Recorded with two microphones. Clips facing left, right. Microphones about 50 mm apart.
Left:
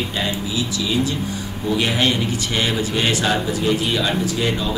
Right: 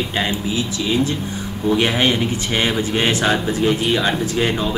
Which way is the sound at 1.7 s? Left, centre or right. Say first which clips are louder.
Right 2 dB; right.